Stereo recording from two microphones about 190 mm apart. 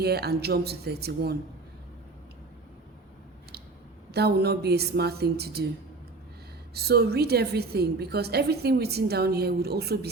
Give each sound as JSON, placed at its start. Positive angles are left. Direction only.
{"t": 0.0, "sound": "a woman's voice", "side_deg": -55}
{"t": 4.1, "sound": "a woman's voice", "side_deg": -60}
{"t": 6.7, "sound": "a woman's voice", "side_deg": -55}